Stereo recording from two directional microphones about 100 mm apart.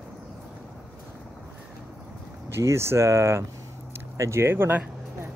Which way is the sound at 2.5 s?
30° right (ahead or behind).